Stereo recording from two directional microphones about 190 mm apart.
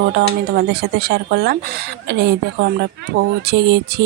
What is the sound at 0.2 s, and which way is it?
Speech, 60° right (ahead or behind).